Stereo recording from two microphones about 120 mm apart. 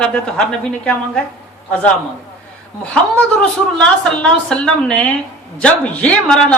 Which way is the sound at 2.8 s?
10° left (ahead or behind).